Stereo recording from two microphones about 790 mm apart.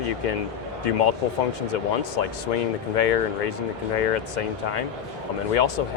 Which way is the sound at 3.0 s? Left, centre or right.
Left.